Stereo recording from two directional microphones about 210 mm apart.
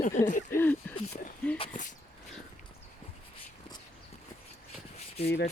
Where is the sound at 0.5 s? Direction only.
10° left (ahead or behind).